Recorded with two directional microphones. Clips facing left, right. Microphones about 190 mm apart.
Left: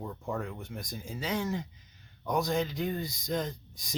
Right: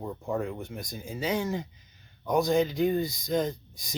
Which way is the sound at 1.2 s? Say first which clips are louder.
Right 4 dB; 5° right (ahead or behind).